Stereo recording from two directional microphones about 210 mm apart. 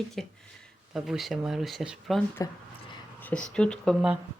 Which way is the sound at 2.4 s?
15° left (ahead or behind).